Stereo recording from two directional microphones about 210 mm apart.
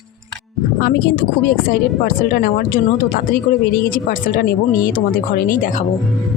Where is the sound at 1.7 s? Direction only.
45° left (ahead or behind).